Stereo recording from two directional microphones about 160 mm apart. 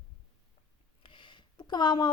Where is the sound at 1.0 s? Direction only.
30° left (ahead or behind).